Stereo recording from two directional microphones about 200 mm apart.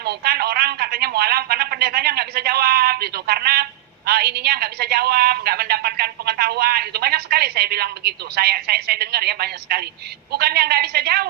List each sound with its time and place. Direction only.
0.0 s a woman's voice: 55° right (ahead or behind)